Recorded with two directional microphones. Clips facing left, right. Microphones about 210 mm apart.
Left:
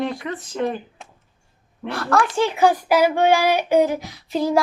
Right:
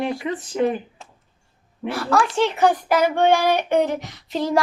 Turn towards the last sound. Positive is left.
turn(degrees=5)  # may be behind; listen again after turning